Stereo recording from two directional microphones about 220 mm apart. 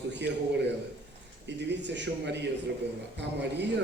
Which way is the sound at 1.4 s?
50° right (ahead or behind).